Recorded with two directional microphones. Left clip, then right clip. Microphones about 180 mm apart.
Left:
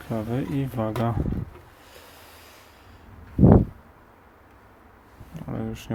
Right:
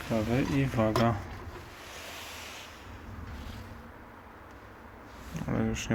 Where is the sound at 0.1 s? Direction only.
20° left (ahead or behind).